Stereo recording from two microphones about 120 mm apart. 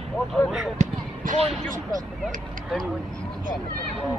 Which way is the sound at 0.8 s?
70° right (ahead or behind).